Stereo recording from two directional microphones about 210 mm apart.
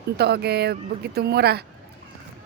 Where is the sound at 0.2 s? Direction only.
50° right (ahead or behind).